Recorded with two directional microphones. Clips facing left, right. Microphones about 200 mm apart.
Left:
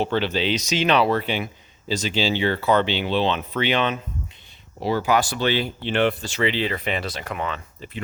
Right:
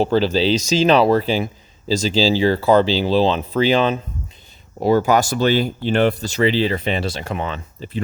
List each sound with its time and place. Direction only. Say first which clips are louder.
0.0 s speech: right 6 dB; 35° right (ahead or behind)
4.8 s speech: right 6 dB; 45° right (ahead or behind); by 8.0 s 30° right (ahead or behind)